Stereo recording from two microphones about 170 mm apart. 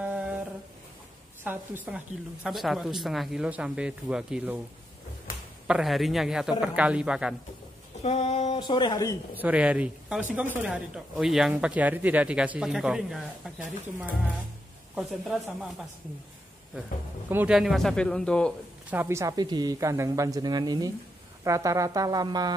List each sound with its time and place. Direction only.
0.0 s humming: 10° right (ahead or behind)
1.4 s speech: 10° right (ahead or behind)
5.7 s speech: centre (ahead or behind)
8.0 s a sound: 40° left (ahead or behind)
8.5 s speech: 25° left (ahead or behind)
9.3 s a woman's voice: 10° right (ahead or behind)
15.0 s speech: centre (ahead or behind)
17.3 s speech: 10° right (ahead or behind)
18.9 s speech: 15° right (ahead or behind)